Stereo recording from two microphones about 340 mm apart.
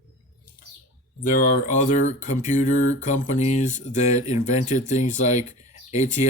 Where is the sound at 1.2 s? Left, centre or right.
Left.